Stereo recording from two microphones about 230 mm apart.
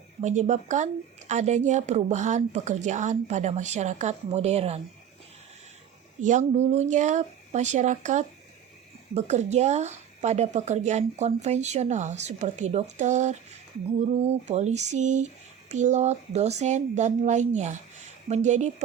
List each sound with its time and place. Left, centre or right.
0.2 s a woman's voice: right
6.1 s a woman's voice: right
14.4 s a woman's voice: right